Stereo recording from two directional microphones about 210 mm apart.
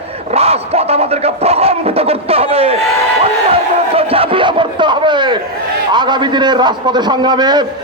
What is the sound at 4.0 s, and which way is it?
A man's voice, 25° right (ahead or behind).